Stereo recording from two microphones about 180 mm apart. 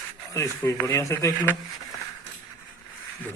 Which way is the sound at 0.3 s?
15° left (ahead or behind).